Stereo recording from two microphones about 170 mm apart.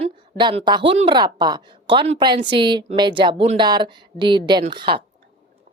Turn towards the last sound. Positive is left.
turn(degrees=-30)  # may be behind; listen again after turning